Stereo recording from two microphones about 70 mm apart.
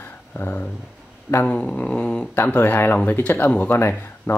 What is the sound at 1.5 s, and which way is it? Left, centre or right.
Dog, centre.